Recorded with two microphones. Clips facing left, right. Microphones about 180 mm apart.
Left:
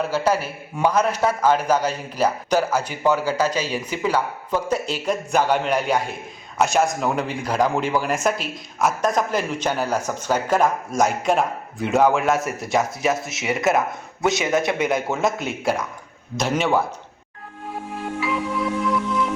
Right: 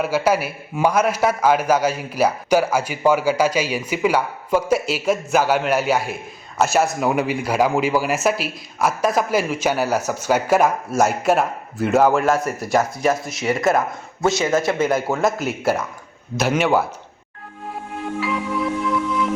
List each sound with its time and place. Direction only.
0.0 s a man's voice: 10° right (ahead or behind)
14.3 s a man's voice: 20° left (ahead or behind)
14.8 s speech: centre (ahead or behind)